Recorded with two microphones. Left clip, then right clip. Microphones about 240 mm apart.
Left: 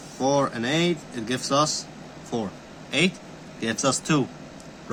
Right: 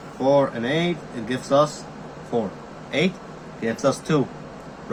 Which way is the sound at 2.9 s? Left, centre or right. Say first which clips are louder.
Even; left.